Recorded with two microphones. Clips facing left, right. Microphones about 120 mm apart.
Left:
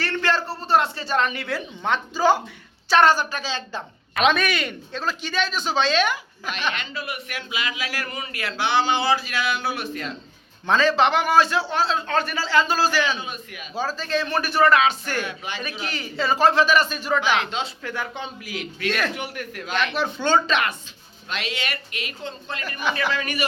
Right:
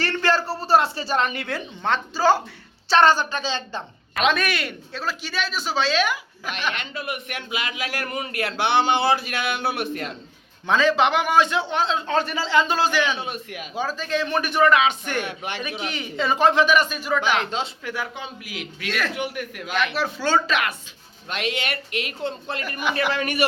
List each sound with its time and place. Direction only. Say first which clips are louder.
0.3 s a sound: right 2 dB; centre (ahead or behind)
1.8 s a woman's voice: even; 15° left (ahead or behind); by 6.5 s 5° right (ahead or behind)
6.7 s a man's voice: right 1 dB; 55° right (ahead or behind)
10.7 s a man's voice: even; 15° right (ahead or behind)
13.1 s a man's voice: right 3 dB; 60° right (ahead or behind)
13.7 s speech: even; 15° right (ahead or behind)
15.2 s speech: right 1 dB; 65° right (ahead or behind)
15.8 s speech: even; 20° right (ahead or behind)
17.3 s speech: even; 45° right (ahead or behind)
17.8 s speech: even; 10° right (ahead or behind)
19.2 s a woman's voice: right 3 dB; 10° right (ahead or behind)
21.2 s a man's voice: right 3 dB; 55° right (ahead or behind)